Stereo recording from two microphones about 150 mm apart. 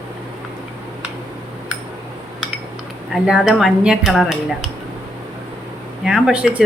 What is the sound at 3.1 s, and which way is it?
Speech, 5° right (ahead or behind).